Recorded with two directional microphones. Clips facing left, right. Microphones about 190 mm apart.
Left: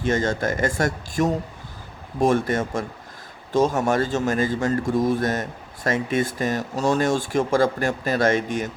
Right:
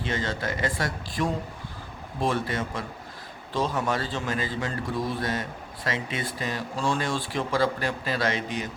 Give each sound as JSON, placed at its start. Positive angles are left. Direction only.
{"t": 0.0, "sound": "speech", "side_deg": 45}